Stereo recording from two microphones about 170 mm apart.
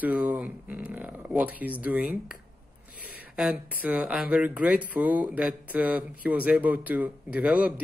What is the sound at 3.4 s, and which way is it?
Speech, 5° right (ahead or behind).